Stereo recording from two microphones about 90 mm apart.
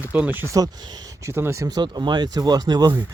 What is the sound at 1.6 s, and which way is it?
Speech, 50° right (ahead or behind).